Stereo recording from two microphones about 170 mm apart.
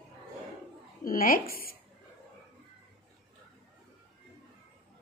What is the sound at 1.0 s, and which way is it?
Speech, 55° left (ahead or behind).